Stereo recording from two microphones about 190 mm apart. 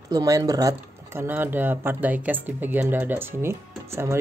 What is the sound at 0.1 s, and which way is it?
Speech, 20° right (ahead or behind).